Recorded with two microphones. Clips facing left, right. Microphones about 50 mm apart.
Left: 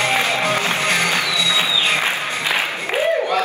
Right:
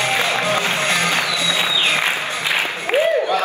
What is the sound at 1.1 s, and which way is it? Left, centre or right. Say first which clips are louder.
Music: even; right.